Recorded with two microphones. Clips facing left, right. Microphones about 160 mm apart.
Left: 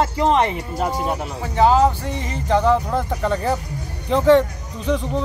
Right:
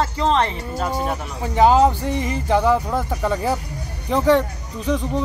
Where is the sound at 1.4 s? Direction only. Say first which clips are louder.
Right 1 dB; 15° right (ahead or behind).